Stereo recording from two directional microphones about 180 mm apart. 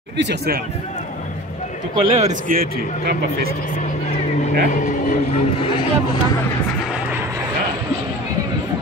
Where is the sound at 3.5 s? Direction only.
45° left (ahead or behind).